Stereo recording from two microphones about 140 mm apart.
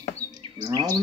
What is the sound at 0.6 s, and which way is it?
Speech, 30° right (ahead or behind).